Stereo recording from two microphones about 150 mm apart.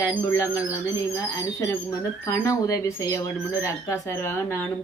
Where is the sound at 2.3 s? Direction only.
20° left (ahead or behind).